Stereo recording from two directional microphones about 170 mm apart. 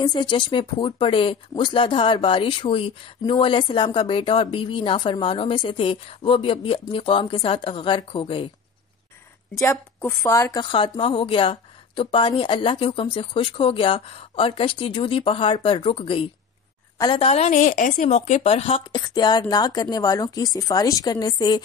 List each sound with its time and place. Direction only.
0.0 s a woman's voice: 25° left (ahead or behind)
9.6 s a woman's voice: 15° left (ahead or behind)